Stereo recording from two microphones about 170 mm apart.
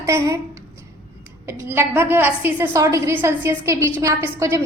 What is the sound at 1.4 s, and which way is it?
A woman's voice, 15° right (ahead or behind).